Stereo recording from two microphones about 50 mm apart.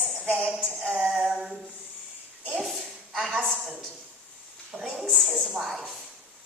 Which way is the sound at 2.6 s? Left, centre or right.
Centre.